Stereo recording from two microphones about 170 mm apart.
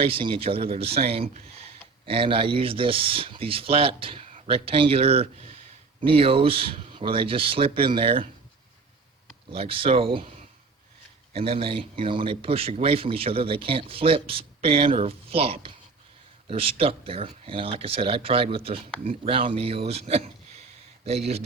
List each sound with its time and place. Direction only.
0.0 s speech: 30° right (ahead or behind)
9.5 s speech: 35° right (ahead or behind)
11.3 s speech: 35° right (ahead or behind)